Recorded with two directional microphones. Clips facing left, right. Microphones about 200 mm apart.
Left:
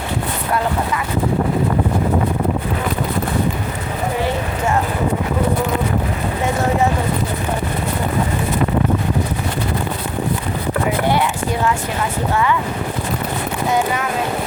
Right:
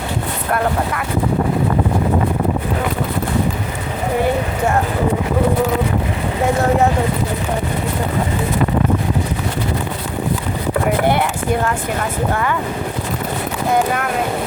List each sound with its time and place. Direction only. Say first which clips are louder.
11.1 s clip-clop: right 1 dB; 55° right (ahead or behind)
12.3 s speech: left 4 dB; 50° right (ahead or behind)